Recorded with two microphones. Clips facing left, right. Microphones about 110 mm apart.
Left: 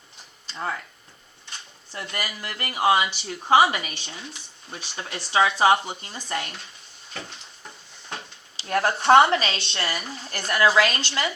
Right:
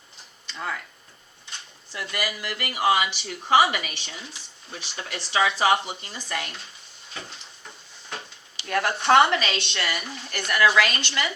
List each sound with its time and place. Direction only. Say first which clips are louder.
0.4 s a sound: left 2 dB; 30° left (ahead or behind)
2.0 s a woman's voice: right 2 dB; 35° left (ahead or behind)
8.6 s a woman's voice: left 2 dB; 30° left (ahead or behind)